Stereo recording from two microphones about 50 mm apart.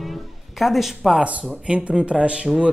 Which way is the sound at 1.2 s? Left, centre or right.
Right.